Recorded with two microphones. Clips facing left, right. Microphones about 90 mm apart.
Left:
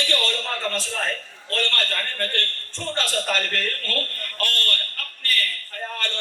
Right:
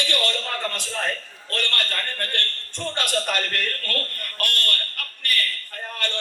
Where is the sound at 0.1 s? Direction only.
15° right (ahead or behind).